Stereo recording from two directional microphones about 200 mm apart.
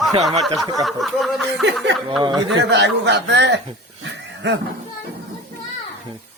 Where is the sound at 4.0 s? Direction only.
60° right (ahead or behind).